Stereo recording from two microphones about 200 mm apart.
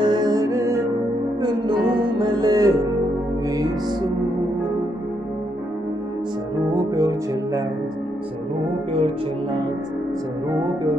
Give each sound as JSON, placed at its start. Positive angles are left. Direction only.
{"t": 0.0, "sound": "music", "side_deg": -20}
{"t": 6.7, "sound": "music", "side_deg": -20}
{"t": 8.9, "sound": "music", "side_deg": -30}